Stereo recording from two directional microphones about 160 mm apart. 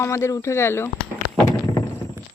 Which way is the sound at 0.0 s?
20° left (ahead or behind).